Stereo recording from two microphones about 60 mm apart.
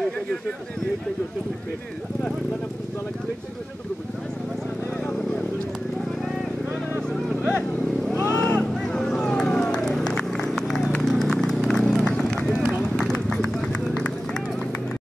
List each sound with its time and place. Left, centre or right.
8.2 s vehicle: right
8.5 s vehicle: centre
10.0 s run: centre